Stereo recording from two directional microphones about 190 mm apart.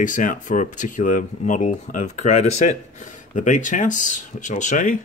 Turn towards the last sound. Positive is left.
turn(degrees=45)  # may be behind; listen again after turning